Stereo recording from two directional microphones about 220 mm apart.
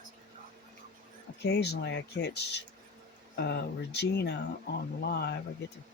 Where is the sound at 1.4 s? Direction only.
50° left (ahead or behind).